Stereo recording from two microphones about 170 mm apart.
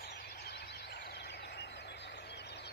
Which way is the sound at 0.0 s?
65° left (ahead or behind).